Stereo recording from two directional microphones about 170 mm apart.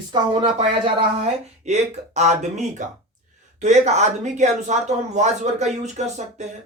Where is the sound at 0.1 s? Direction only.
30° right (ahead or behind).